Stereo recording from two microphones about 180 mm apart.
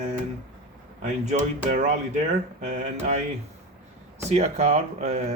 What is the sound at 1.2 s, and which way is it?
Speech, 40° right (ahead or behind).